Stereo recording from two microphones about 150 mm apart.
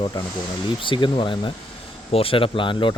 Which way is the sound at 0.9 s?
35° left (ahead or behind).